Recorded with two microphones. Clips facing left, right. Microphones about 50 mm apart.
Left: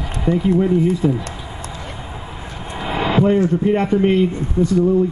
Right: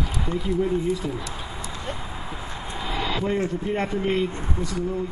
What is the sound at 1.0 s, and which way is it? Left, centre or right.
Speech, left.